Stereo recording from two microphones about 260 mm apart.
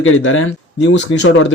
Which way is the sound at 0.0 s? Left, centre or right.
Left.